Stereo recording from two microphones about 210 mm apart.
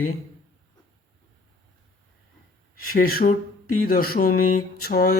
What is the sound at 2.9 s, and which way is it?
Speech, 45° left (ahead or behind).